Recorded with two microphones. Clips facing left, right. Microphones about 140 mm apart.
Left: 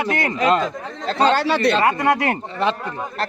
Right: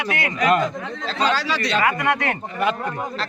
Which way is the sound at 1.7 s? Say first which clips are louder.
Left 3 dB; 30° left (ahead or behind).